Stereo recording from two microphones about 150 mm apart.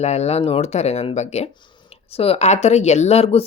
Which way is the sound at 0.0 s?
45° left (ahead or behind).